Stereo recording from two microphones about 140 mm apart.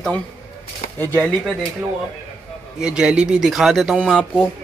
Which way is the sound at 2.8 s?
5° right (ahead or behind).